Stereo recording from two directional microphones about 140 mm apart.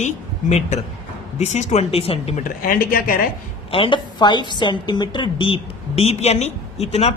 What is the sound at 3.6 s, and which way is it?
A woman's voice, 40° left (ahead or behind).